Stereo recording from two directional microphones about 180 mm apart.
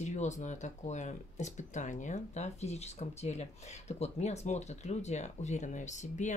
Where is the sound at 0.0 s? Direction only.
40° left (ahead or behind).